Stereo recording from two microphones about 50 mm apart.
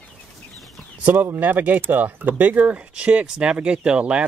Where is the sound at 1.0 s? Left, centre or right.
Right.